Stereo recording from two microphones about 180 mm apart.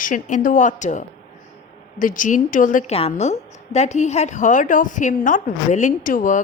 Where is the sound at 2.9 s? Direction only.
35° left (ahead or behind).